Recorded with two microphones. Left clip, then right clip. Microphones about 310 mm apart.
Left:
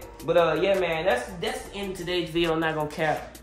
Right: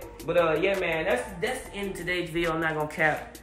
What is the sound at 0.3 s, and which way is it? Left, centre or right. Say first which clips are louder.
Speech: left 2 dB; left.